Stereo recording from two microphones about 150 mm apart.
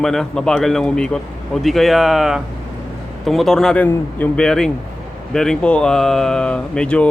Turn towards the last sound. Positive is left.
turn(degrees=5)  # may be behind; listen again after turning